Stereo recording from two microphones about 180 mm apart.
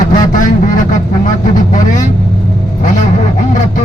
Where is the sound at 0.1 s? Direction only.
45° left (ahead or behind).